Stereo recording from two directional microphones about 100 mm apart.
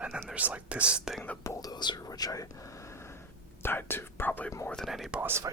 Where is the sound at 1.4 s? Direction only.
35° left (ahead or behind).